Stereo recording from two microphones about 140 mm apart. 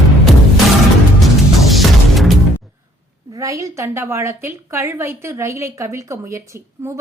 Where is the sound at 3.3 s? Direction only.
20° right (ahead or behind).